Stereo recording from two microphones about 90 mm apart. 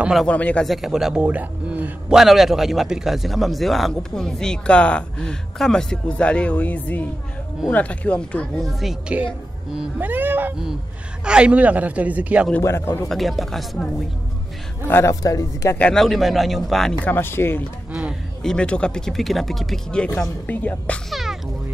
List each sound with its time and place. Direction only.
0.3 s speech: 15° left (ahead or behind)
0.7 s speech: 5° right (ahead or behind)
2.0 s a man's voice: 5° right (ahead or behind); by 8.5 s 10° left (ahead or behind)
8.5 s a man's voice: centre (ahead or behind)
9.1 s a man's voice: 15° right (ahead or behind)
11.2 s a man's voice: 10° right (ahead or behind)
12.6 s speech: 30° left (ahead or behind)
13.1 s a man's voice: centre (ahead or behind)
14.9 s speech: 25° left (ahead or behind)
15.2 s speech: 35° left (ahead or behind)
15.9 s a man's voice: centre (ahead or behind)
17.0 s speech: 25° left (ahead or behind)
18.4 s speech: 10° left (ahead or behind)
21.1 s speech: centre (ahead or behind)